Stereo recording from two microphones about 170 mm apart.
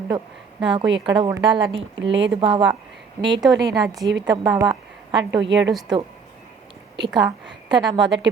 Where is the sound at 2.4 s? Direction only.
30° right (ahead or behind).